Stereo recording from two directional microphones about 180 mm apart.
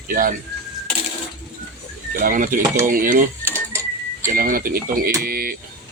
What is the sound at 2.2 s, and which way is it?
Speech, 50° right (ahead or behind).